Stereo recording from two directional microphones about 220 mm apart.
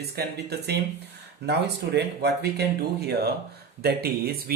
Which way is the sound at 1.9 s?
45° right (ahead or behind).